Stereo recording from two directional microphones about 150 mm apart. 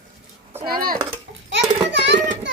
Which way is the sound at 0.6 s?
80° right.